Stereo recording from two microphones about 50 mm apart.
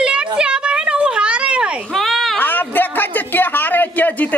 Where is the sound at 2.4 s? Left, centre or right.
Left.